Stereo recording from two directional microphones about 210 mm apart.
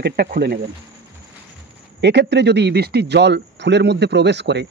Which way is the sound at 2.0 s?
55° right (ahead or behind).